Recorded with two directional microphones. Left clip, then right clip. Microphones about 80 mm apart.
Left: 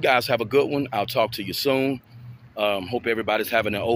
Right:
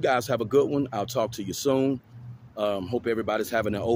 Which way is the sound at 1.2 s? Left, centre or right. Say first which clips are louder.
Left 4 dB; right.